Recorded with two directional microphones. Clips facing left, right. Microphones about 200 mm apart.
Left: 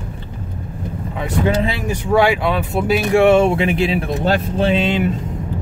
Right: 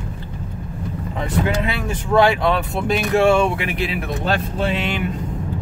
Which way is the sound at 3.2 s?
25° left (ahead or behind).